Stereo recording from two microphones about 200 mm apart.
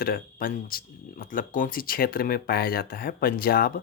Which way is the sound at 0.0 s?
45° left (ahead or behind).